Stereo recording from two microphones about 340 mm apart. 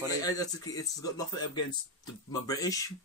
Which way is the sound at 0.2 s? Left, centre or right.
Centre.